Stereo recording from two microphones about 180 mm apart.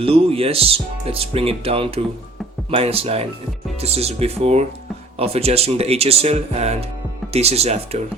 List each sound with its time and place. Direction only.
0.0 s speech: 30° right (ahead or behind)